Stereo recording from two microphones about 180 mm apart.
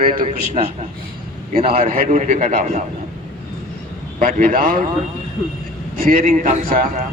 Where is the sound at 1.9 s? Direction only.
45° right (ahead or behind).